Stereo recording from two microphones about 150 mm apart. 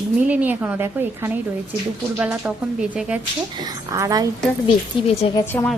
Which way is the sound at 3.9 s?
25° right (ahead or behind).